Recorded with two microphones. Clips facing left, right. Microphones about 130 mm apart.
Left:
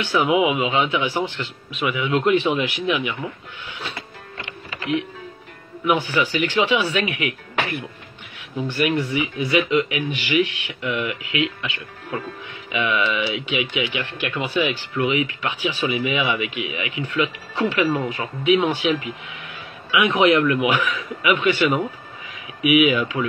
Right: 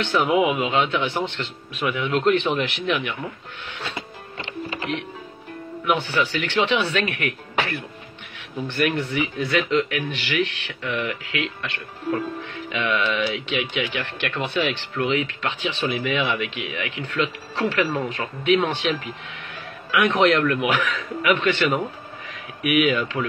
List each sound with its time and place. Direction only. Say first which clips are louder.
0.1 s speech: left 2 dB; 5° left (ahead or behind)
5.9 s speech: left 2 dB; 10° left (ahead or behind)
16.5 s speech: left 2 dB; 55° right (ahead or behind)
17.2 s speech: left 1 dB; 15° left (ahead or behind)